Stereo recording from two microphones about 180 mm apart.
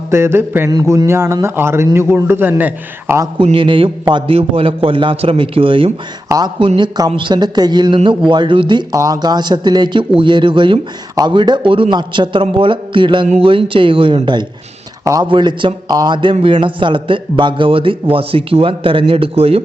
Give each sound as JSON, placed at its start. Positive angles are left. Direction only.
{"t": 0.1, "sound": "a man's voice", "side_deg": -15}
{"t": 3.3, "sound": "a man's voice", "side_deg": -30}